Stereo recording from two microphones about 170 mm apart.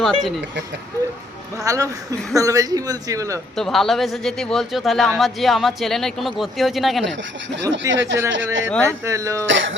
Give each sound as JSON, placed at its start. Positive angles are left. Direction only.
{"t": 0.0, "sound": "a man's voice", "side_deg": 0}
{"t": 1.5, "sound": "speech", "side_deg": -20}
{"t": 3.5, "sound": "a man's voice", "side_deg": 0}
{"t": 7.5, "sound": "speech", "side_deg": -90}
{"t": 8.8, "sound": "speech", "side_deg": -15}
{"t": 9.5, "sound": "speech", "side_deg": -90}